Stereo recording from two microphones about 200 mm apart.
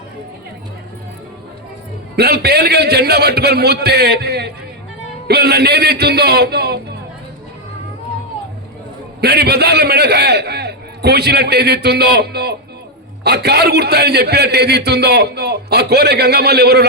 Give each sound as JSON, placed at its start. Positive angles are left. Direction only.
{"t": 2.1, "sound": "a man's voice", "side_deg": -55}
{"t": 9.2, "sound": "a man's voice", "side_deg": -55}